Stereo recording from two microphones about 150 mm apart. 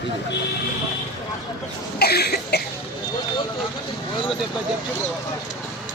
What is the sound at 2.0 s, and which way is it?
Cough, 90° left.